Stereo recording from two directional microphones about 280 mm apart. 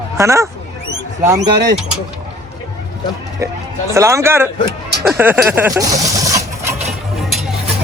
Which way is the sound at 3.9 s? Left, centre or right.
Centre.